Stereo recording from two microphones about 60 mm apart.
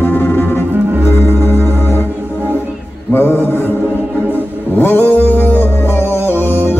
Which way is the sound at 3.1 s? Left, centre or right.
Left.